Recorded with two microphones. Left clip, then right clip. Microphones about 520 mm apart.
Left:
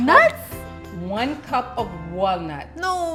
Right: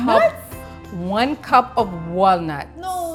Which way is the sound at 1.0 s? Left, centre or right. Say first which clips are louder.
Right 5 dB; right.